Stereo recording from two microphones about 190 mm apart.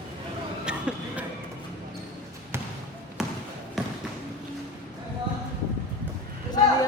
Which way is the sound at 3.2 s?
Centre (ahead or behind).